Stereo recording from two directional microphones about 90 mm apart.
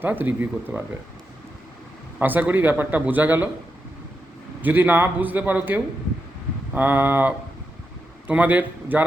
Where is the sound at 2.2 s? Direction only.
20° right (ahead or behind).